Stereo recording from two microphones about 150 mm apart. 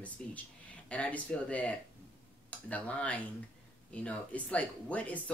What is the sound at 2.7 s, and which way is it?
Speech, 10° left (ahead or behind).